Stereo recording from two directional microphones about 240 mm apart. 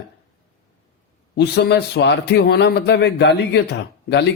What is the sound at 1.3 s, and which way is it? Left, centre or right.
Speech, left.